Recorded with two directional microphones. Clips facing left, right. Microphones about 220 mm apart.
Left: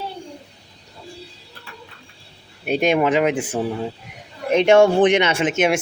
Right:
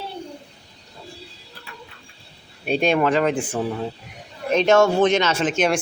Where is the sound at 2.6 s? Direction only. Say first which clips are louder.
Left 1 dB; 10° left (ahead or behind).